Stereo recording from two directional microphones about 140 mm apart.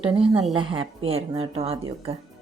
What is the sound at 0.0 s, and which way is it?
A woman's voice, 40° right (ahead or behind).